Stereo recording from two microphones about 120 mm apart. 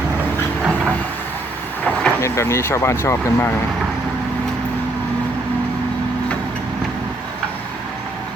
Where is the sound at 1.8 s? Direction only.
10° left (ahead or behind).